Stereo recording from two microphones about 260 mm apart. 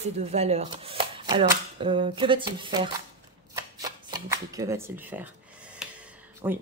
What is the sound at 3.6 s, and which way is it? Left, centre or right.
Shuffling cards, centre.